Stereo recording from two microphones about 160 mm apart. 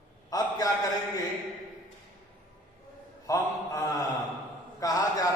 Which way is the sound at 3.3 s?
20° left (ahead or behind).